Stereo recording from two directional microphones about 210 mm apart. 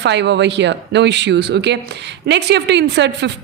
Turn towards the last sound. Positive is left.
turn(degrees=-55)  # may be behind; listen again after turning